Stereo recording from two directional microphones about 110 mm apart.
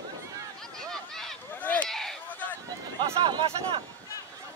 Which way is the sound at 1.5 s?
15° left (ahead or behind).